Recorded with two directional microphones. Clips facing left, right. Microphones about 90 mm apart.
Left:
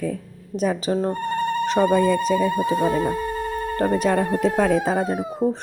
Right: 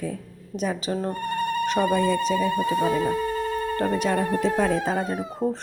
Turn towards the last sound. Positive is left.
turn(degrees=15)  # may be behind; listen again after turning